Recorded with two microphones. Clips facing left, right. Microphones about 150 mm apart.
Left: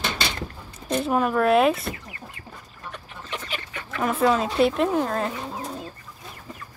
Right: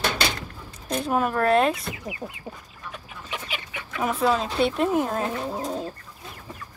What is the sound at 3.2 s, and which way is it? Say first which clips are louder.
Chicken: left 1 dB; 5° right (ahead or behind).